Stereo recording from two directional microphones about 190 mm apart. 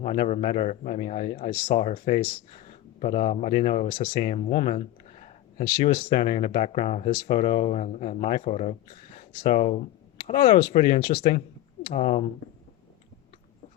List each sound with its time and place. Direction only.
0.0 s a man's voice: 35° left (ahead or behind)
7.1 s speech: 55° left (ahead or behind)
7.3 s a man's voice: 35° left (ahead or behind); by 11.3 s 50° left (ahead or behind)
11.9 s a man's voice: 35° left (ahead or behind)